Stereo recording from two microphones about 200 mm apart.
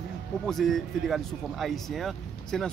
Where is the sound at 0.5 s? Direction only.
Centre (ahead or behind).